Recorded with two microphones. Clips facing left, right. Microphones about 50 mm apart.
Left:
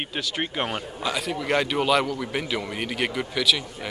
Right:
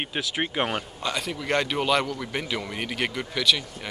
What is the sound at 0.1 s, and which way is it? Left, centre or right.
Speech, centre.